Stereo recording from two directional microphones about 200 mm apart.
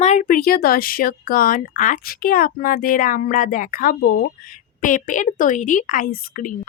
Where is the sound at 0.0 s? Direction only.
35° left (ahead or behind).